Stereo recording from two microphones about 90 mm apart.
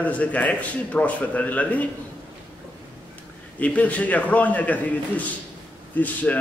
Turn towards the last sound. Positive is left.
turn(degrees=20)  # may be behind; listen again after turning